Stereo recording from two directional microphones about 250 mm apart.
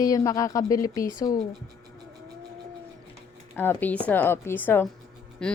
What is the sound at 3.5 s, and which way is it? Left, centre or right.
A woman's voice, centre.